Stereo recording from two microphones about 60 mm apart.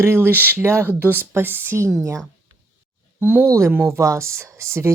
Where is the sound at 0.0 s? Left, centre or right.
Right.